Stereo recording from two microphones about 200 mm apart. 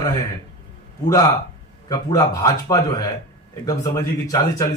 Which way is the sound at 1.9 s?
15° left (ahead or behind).